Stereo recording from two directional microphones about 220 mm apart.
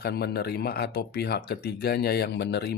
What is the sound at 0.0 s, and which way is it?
Speech, 45° left (ahead or behind).